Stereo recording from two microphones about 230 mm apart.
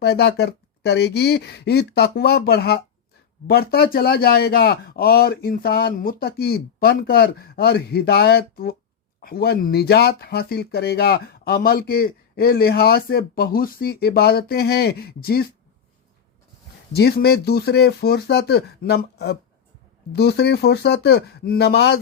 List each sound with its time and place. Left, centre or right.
0.0 s speech: left
16.9 s speech: left